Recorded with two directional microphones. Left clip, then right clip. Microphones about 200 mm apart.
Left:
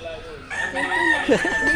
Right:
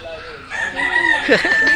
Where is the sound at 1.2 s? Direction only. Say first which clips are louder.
Right 6 dB; 15° left (ahead or behind).